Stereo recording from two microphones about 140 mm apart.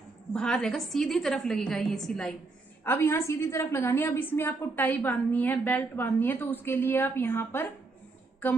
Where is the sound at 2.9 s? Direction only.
20° left (ahead or behind).